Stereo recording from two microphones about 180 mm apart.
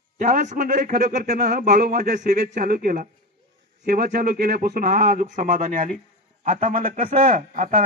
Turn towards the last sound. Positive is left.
turn(degrees=-50)  # may be behind; listen again after turning